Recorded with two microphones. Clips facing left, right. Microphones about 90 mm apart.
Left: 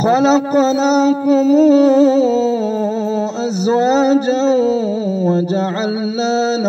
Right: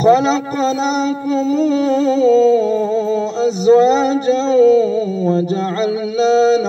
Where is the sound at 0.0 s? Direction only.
30° left (ahead or behind).